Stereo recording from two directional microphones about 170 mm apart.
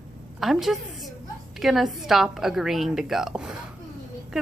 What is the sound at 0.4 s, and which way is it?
A woman's voice, centre (ahead or behind).